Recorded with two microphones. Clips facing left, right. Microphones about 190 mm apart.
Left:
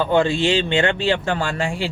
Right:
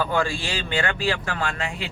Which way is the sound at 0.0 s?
25° left (ahead or behind).